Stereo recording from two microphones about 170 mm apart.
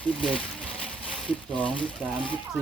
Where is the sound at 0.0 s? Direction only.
5° left (ahead or behind).